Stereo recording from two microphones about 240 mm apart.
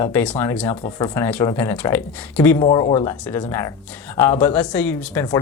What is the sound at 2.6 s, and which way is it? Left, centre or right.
Speech, left.